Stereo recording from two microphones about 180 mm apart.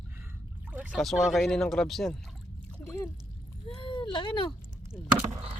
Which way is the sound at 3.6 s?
30° left (ahead or behind).